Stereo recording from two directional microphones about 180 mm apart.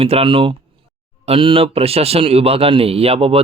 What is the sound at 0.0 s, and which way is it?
Speech, 30° right (ahead or behind).